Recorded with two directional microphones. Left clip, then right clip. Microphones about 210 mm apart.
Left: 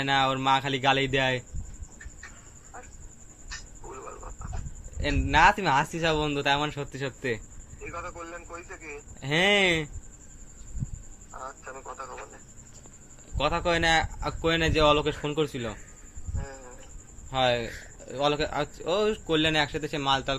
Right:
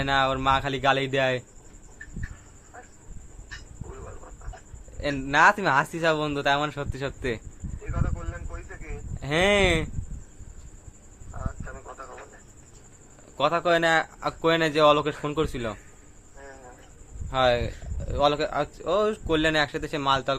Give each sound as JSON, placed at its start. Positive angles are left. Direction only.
{"t": 0.0, "sound": "speech", "side_deg": -10}
{"t": 3.5, "sound": "a sound", "side_deg": 15}
{"t": 4.9, "sound": "speech", "side_deg": -10}
{"t": 7.9, "sound": "a sound", "side_deg": 5}
{"t": 9.2, "sound": "speech", "side_deg": -15}
{"t": 11.3, "sound": "radio", "side_deg": 10}
{"t": 13.3, "sound": "speech", "side_deg": -20}
{"t": 16.4, "sound": "a sound", "side_deg": 5}
{"t": 17.3, "sound": "speech", "side_deg": -20}